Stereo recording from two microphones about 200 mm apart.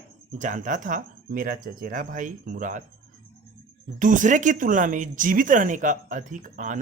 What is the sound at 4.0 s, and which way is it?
Speech, 40° right (ahead or behind).